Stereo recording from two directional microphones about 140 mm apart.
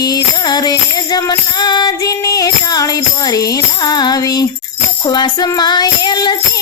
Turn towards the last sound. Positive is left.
turn(degrees=30)  # may be behind; listen again after turning